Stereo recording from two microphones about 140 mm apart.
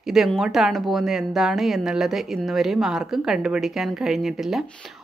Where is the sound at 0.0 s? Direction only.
Centre (ahead or behind).